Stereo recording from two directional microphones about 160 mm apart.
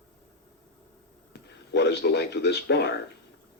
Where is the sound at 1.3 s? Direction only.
90° left.